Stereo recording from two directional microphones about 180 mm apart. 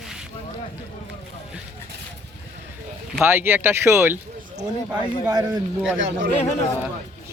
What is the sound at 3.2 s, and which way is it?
Speech, 10° right (ahead or behind).